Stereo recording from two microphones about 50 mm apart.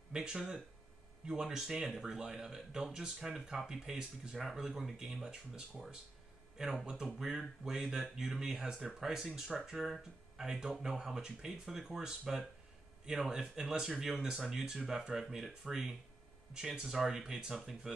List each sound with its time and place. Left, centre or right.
0.1 s speech: centre
6.6 s speech: centre
10.3 s speech: centre